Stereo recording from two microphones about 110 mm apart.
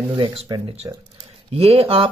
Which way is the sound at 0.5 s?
40° right (ahead or behind).